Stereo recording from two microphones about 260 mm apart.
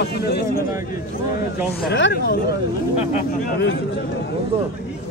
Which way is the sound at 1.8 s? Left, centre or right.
Left.